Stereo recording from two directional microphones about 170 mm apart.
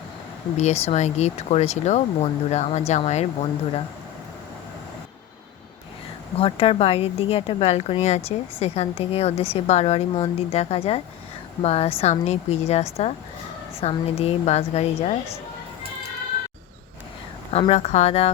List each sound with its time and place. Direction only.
0.5 s a woman's voice: 40° left (ahead or behind)
6.4 s a woman's voice: 35° left (ahead or behind)
17.5 s a woman's voice: 35° left (ahead or behind)